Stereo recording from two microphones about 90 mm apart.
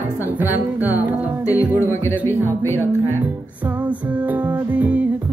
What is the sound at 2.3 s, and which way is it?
Music, 25° right (ahead or behind).